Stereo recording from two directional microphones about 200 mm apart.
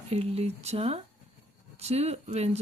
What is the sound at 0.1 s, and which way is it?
Speech, 30° right (ahead or behind).